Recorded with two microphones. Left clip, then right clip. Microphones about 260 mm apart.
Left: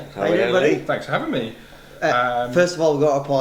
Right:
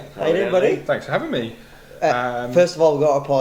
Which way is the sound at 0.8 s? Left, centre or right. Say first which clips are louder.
Right 1 dB; right.